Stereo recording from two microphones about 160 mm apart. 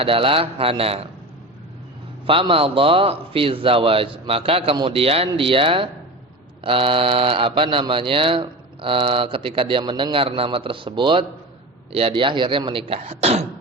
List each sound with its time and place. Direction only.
0.0 s speech: 35° right (ahead or behind)
2.2 s speech: 35° right (ahead or behind)